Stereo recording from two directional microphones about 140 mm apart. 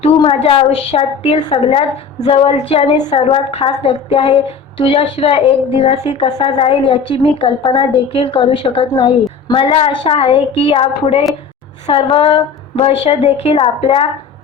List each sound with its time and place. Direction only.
0.2 s child singing: 40° left (ahead or behind)
6.1 s a woman's voice: 40° left (ahead or behind)
11.9 s child singing: 45° left (ahead or behind)